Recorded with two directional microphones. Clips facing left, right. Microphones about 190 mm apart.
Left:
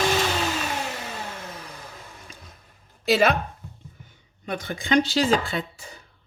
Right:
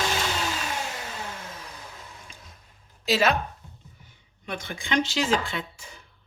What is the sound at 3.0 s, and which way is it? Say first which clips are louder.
Speech: left 3 dB; 55° left (ahead or behind).